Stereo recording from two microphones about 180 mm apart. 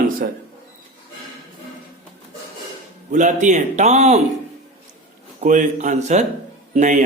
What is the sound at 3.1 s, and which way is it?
A man's voice, 45° right (ahead or behind).